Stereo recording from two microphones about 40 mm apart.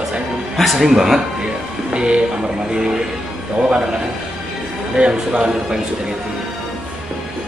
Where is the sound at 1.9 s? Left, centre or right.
Right.